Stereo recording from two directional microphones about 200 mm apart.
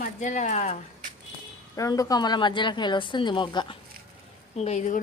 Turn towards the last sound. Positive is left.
turn(degrees=35)  # may be behind; listen again after turning